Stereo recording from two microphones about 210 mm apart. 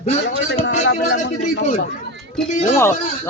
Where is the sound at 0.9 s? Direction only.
50° left (ahead or behind).